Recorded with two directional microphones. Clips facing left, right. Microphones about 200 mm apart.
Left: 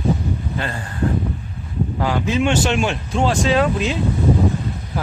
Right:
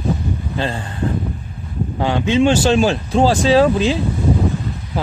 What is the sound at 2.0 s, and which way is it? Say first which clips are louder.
Speech: right 5 dB; 25° right (ahead or behind).